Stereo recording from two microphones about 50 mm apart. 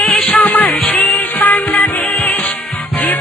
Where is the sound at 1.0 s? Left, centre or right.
Left.